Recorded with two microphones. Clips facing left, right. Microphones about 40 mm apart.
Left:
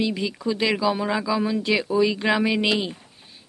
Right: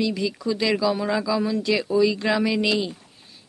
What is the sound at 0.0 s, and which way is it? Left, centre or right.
Speech, left.